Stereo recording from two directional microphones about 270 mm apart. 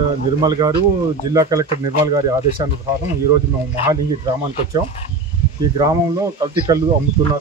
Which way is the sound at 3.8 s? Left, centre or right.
Centre.